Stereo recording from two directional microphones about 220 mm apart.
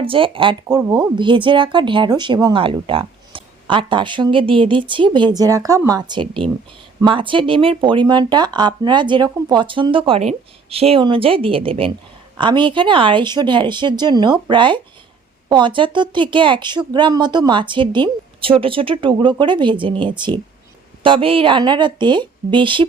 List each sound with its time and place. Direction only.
0.0 s speech: 25° right (ahead or behind)